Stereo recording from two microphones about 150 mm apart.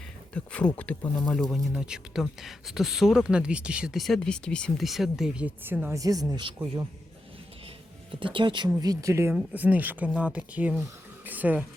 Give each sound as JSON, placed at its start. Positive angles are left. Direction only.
{"t": 0.3, "sound": "speech", "side_deg": 10}
{"t": 6.0, "sound": "speech", "side_deg": -25}
{"t": 8.1, "sound": "speech", "side_deg": -35}